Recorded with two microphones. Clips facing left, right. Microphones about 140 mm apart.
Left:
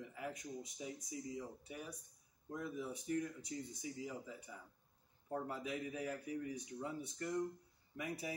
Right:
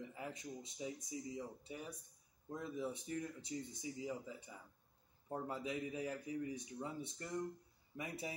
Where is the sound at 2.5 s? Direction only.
25° right (ahead or behind).